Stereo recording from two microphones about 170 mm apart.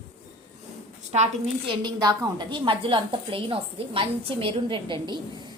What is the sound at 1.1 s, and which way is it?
Speech, 40° right (ahead or behind).